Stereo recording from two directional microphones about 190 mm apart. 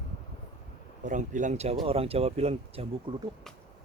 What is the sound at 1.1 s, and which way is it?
Speech, 40° right (ahead or behind).